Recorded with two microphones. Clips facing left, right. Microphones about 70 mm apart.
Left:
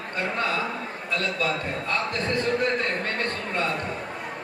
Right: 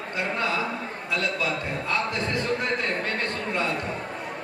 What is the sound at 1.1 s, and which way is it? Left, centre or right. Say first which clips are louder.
Speech: left 1 dB; left.